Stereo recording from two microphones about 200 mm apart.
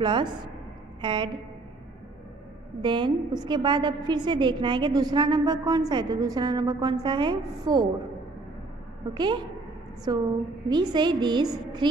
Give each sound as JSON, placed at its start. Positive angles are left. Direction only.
{"t": 0.0, "sound": "a woman's voice", "side_deg": -25}
{"t": 2.8, "sound": "a woman's voice", "side_deg": -25}
{"t": 9.1, "sound": "a woman's voice", "side_deg": -20}